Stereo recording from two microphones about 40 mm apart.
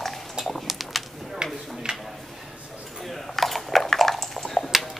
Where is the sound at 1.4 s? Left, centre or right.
Centre.